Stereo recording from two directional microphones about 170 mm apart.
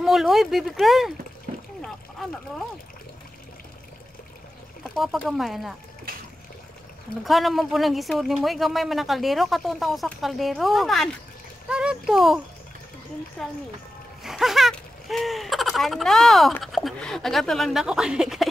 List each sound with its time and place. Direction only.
0.0 s speech: centre (ahead or behind)
1.5 s a sound: 50° right (ahead or behind)
4.9 s speech: centre (ahead or behind)
7.2 s speech: centre (ahead or behind)
13.4 s speech: centre (ahead or behind)